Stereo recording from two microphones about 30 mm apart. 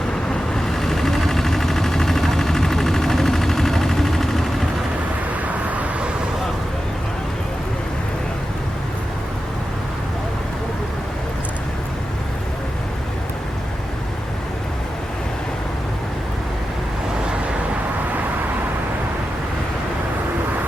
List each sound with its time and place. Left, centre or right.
0.5 s vehicle: centre
5.6 s vehicle: right